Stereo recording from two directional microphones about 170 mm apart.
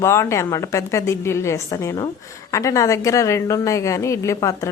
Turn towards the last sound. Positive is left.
turn(degrees=20)  # may be behind; listen again after turning